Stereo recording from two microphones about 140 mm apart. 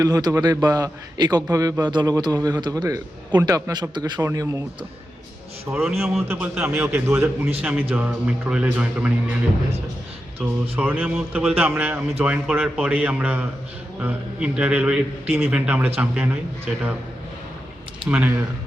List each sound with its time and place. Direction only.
0.0 s a man's voice: 25° right (ahead or behind)
4.2 s a man's voice: 20° right (ahead or behind)
5.9 s a man's voice: centre (ahead or behind)
10.4 s a man's voice: 5° right (ahead or behind)
18.1 s a man's voice: 10° right (ahead or behind)